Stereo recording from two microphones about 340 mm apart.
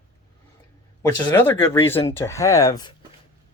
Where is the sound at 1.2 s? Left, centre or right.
Centre.